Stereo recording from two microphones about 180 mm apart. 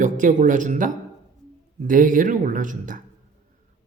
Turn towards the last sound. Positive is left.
turn(degrees=-45)  # may be behind; listen again after turning